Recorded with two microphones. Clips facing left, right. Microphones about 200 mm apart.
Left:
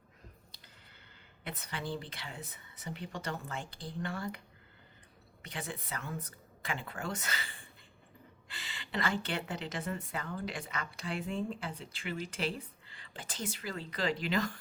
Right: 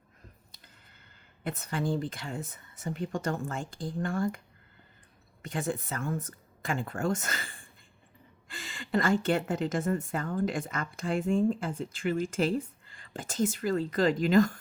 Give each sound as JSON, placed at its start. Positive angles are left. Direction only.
{"t": 1.5, "sound": "a woman's voice", "side_deg": -45}
{"t": 5.4, "sound": "a woman's voice", "side_deg": -45}